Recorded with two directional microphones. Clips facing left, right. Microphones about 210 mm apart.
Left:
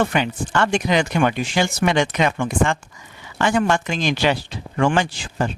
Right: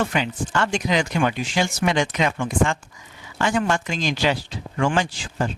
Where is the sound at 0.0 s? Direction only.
60° left (ahead or behind).